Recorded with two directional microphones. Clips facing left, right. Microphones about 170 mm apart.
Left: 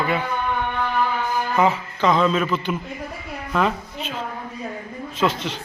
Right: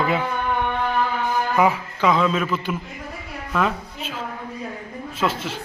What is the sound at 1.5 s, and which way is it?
A man's voice, 10° right (ahead or behind).